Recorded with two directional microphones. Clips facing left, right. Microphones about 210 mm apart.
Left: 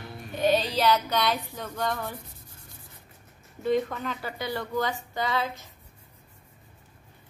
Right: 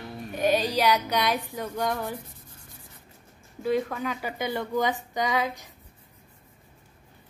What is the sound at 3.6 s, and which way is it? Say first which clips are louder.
A woman's voice: even; 5° right (ahead or behind).